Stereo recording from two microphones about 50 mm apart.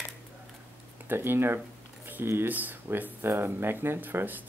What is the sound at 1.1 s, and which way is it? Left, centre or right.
Speech, right.